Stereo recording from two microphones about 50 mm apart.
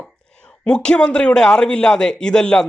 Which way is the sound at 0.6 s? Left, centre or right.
Centre.